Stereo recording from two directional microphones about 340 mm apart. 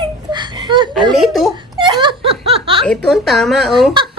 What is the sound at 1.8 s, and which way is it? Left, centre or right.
Laughter, centre.